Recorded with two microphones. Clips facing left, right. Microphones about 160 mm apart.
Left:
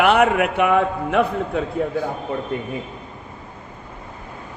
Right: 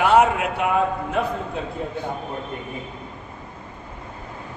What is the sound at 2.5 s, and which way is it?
Speech, 90° left.